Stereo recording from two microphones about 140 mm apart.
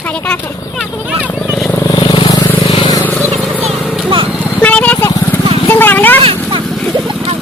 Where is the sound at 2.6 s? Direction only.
45° left (ahead or behind).